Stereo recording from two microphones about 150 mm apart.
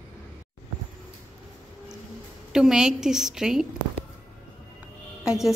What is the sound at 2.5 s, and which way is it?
A woman's voice, 5° right (ahead or behind).